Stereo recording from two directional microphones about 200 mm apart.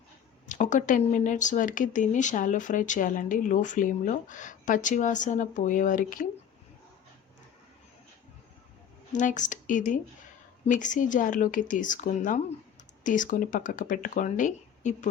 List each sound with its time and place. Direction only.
0.4 s speech: 40° left (ahead or behind)
9.1 s speech: 40° left (ahead or behind)